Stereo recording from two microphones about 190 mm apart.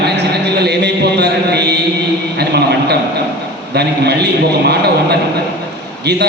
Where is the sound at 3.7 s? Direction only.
60° right (ahead or behind).